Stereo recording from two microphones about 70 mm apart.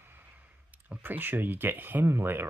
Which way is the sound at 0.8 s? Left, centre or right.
Right.